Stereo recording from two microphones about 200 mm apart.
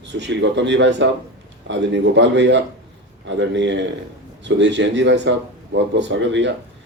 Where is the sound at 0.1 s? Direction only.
60° right (ahead or behind).